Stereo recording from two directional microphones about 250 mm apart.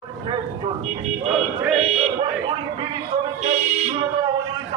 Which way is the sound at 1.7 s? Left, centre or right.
Right.